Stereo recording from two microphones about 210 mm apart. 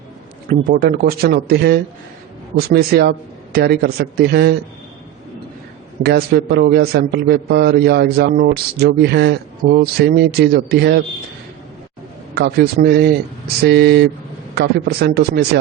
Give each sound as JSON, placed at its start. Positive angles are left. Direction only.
{"t": 0.7, "sound": "a man's voice", "side_deg": -45}
{"t": 6.0, "sound": "a man's voice", "side_deg": -50}
{"t": 12.3, "sound": "a man's voice", "side_deg": -50}